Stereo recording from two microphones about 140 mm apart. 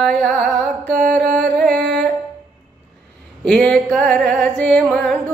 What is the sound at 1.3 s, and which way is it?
Music, 5° left (ahead or behind).